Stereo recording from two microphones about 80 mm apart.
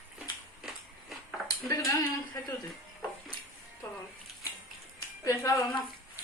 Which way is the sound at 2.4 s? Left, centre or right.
Left.